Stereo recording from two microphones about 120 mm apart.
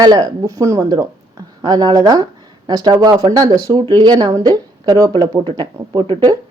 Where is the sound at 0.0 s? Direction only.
35° right (ahead or behind).